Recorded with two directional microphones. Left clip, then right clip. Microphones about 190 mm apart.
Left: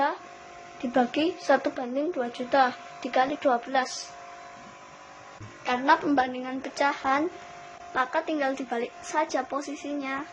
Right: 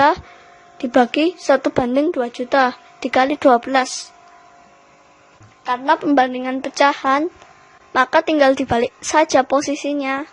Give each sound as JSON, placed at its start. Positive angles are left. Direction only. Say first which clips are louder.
{"t": 0.9, "sound": "a woman's voice", "louder": "right 10 dB", "side_deg": -65}
{"t": 5.6, "sound": "a woman's voice", "louder": "right 6 dB", "side_deg": -45}